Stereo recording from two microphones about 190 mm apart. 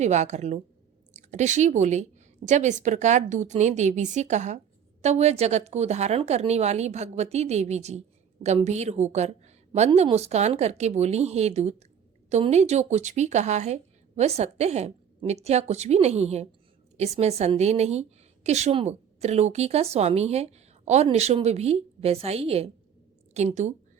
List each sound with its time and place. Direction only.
0.0 s a woman's voice: 35° right (ahead or behind)